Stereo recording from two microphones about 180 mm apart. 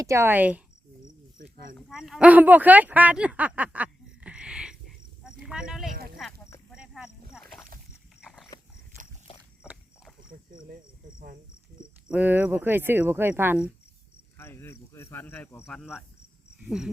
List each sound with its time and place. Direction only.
0.0 s speech: 15° right (ahead or behind)
1.4 s a sound: 55° right (ahead or behind)
1.9 s a sound: 5° right (ahead or behind)
6.2 s speech: centre (ahead or behind)
6.7 s a sound: 5° right (ahead or behind)
8.2 s dog: centre (ahead or behind)
12.0 s speech: 10° right (ahead or behind)
14.3 s speech: 10° left (ahead or behind)
15.8 s cricket: 5° right (ahead or behind)